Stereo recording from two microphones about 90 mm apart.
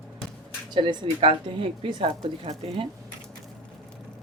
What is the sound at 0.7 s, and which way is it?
Speech, 60° right (ahead or behind).